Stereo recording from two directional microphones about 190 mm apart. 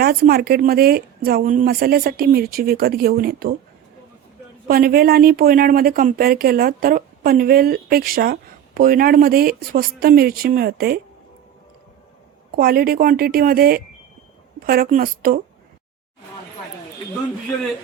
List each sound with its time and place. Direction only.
0.0 s speech: 50° right (ahead or behind)
4.7 s speech: 50° right (ahead or behind)
12.5 s speech: 50° right (ahead or behind)